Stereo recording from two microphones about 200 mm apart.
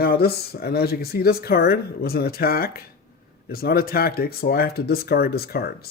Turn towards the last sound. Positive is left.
turn(degrees=50)  # may be behind; listen again after turning